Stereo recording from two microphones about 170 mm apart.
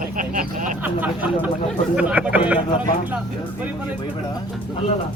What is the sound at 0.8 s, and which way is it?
Speech, 10° right (ahead or behind).